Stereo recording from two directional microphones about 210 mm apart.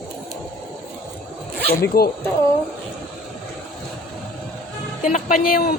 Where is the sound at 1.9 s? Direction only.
45° left (ahead or behind).